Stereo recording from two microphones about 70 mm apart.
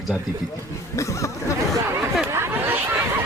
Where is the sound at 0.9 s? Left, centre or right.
Left.